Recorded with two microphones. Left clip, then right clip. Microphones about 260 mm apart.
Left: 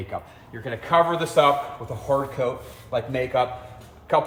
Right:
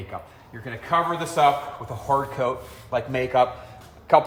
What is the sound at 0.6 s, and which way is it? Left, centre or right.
Speech, centre.